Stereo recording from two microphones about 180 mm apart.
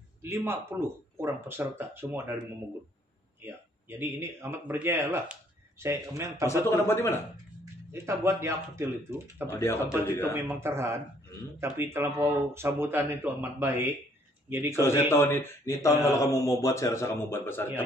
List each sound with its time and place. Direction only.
0.2 s speech: 15° right (ahead or behind)
3.4 s speech: 10° right (ahead or behind)
6.4 s a man's voice: 15° left (ahead or behind)
7.9 s speech: 15° right (ahead or behind)
9.6 s a man's voice: 15° left (ahead or behind)
10.3 s speech: 15° right (ahead or behind)
14.8 s a man's voice: 15° left (ahead or behind)